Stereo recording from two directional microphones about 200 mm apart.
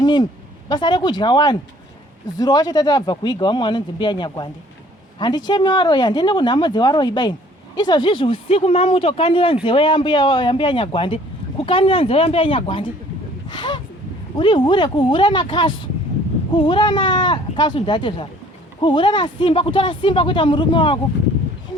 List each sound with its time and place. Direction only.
0.0 s speech: 20° left (ahead or behind)
5.5 s speech: 20° left (ahead or behind)